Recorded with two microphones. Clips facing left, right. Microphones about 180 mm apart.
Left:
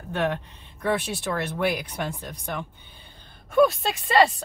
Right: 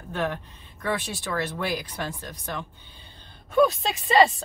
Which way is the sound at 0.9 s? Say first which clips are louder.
Left 3 dB; 60° left (ahead or behind).